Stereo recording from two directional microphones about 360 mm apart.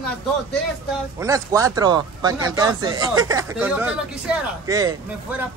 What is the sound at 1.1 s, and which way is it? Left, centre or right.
Speech, centre.